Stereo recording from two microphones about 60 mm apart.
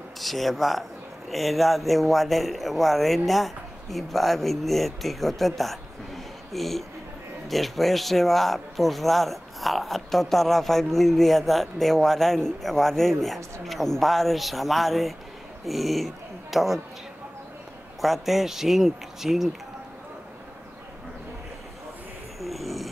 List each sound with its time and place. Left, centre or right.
0.2 s speech: centre
18.0 s speech: centre
22.4 s a sound: centre